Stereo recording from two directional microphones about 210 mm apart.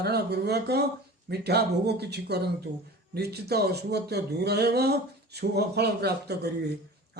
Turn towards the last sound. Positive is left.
turn(degrees=-50)  # may be behind; listen again after turning